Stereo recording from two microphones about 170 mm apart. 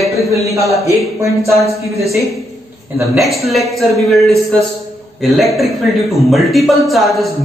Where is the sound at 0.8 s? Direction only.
15° right (ahead or behind).